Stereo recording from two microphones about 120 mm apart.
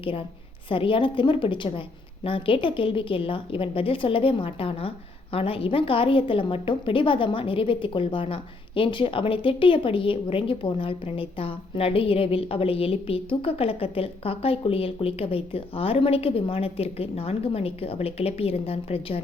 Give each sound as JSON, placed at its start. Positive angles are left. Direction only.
{"t": 0.0, "sound": "a woman's voice", "side_deg": 50}